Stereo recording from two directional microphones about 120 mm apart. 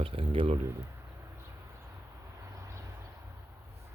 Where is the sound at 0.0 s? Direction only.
50° right (ahead or behind).